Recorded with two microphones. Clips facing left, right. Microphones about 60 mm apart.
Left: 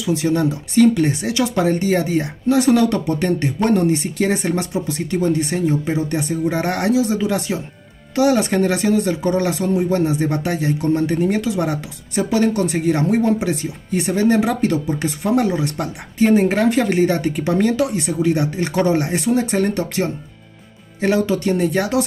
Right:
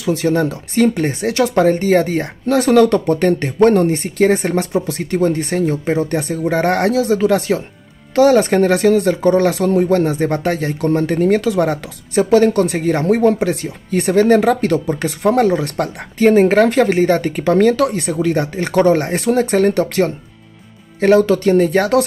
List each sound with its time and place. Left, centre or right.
0.0 s speech: right